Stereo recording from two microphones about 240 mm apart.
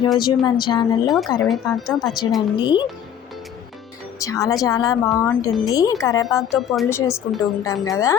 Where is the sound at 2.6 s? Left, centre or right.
Centre.